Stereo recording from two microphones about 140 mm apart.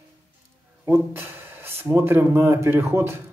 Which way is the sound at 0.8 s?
15° right (ahead or behind).